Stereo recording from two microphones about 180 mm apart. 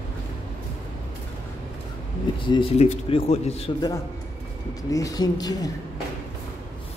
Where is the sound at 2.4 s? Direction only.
30° left (ahead or behind).